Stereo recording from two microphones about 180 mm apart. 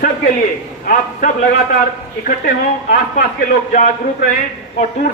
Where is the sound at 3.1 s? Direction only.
50° left (ahead or behind).